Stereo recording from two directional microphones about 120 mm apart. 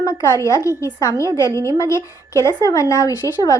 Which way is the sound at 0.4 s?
25° left (ahead or behind).